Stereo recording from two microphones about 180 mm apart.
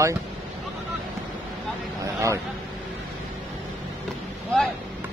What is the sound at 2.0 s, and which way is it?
Vehicle, 15° right (ahead or behind).